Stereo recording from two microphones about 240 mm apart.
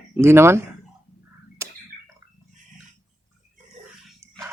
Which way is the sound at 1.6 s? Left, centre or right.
Centre.